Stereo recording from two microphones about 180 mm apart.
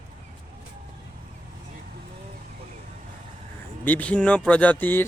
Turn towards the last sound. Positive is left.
turn(degrees=10)  # may be behind; listen again after turning